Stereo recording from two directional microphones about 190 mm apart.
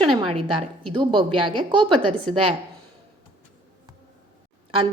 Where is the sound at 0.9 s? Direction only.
25° right (ahead or behind).